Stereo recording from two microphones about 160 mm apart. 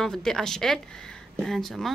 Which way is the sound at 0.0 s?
5° left (ahead or behind).